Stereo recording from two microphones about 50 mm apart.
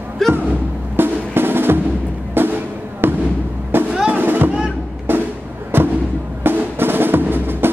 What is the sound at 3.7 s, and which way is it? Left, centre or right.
Drum, right.